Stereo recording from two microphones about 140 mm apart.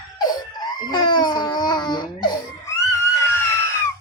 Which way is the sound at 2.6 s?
20° left (ahead or behind).